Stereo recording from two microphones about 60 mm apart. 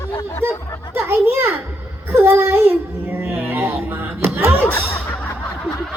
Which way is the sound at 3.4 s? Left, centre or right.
Right.